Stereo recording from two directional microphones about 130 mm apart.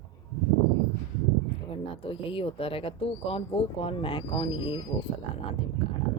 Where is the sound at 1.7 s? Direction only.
45° left (ahead or behind).